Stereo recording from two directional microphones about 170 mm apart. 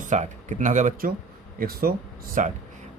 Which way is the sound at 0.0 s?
45° right (ahead or behind).